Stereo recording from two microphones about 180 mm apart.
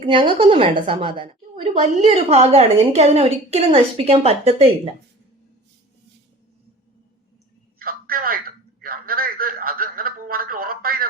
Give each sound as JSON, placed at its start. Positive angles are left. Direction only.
{"t": 0.0, "sound": "a woman's voice", "side_deg": -30}
{"t": 7.8, "sound": "telephone", "side_deg": -55}